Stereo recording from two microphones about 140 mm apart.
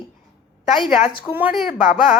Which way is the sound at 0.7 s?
5° right (ahead or behind).